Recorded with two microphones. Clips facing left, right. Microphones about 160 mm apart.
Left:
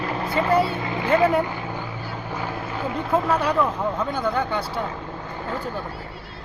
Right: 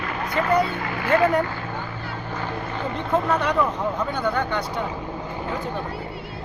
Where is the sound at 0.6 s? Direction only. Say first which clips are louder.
Left 1 dB; 20° left (ahead or behind).